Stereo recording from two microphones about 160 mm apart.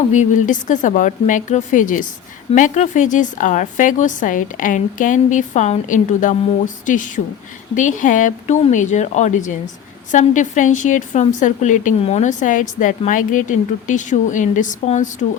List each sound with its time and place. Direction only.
0.1 s a woman's voice: 50° left (ahead or behind)